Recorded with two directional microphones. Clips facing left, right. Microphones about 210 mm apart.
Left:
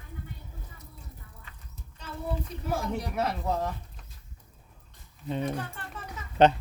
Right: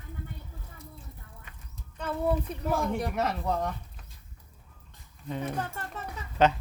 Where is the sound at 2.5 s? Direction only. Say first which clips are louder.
Right 3 dB; 55° right (ahead or behind).